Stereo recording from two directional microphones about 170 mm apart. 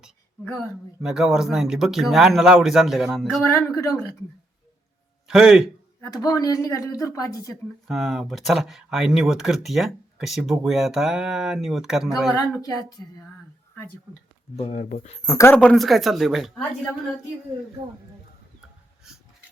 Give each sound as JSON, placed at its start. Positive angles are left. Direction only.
{"t": 1.0, "sound": "speech", "side_deg": -5}
{"t": 3.4, "sound": "speech", "side_deg": 20}
{"t": 5.3, "sound": "speech", "side_deg": -5}
{"t": 6.0, "sound": "speech", "side_deg": 20}
{"t": 7.9, "sound": "speech", "side_deg": 0}
{"t": 13.0, "sound": "speech", "side_deg": 20}
{"t": 14.5, "sound": "speech", "side_deg": 40}
{"t": 15.3, "sound": "speech", "side_deg": 15}
{"t": 15.5, "sound": "speech", "side_deg": 5}